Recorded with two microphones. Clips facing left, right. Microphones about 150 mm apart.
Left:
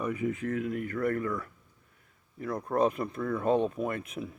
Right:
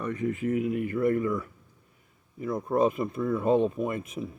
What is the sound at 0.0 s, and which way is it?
Speech, 10° left (ahead or behind).